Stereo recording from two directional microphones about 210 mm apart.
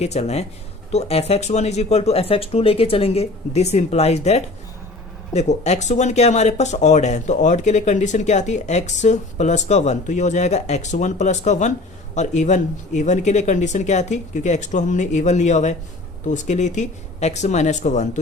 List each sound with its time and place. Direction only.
0.0 s speech: 30° left (ahead or behind)